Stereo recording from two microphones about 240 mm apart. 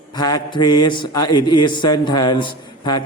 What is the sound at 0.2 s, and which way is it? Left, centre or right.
A man's voice, centre.